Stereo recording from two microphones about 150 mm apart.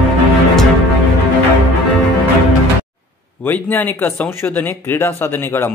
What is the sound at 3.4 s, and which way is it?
A man's voice, 10° left (ahead or behind).